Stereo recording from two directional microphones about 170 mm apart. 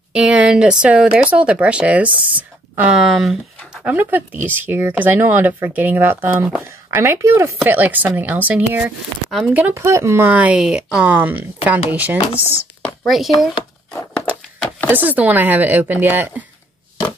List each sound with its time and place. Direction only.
0.1 s speech: 5° right (ahead or behind)
14.3 s a sound: 5° left (ahead or behind)
14.9 s speech: 10° right (ahead or behind)